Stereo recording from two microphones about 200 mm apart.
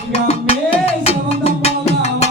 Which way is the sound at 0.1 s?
30° left (ahead or behind).